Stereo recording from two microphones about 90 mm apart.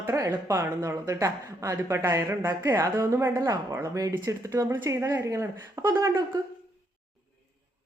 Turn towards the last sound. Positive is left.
turn(degrees=-30)  # may be behind; listen again after turning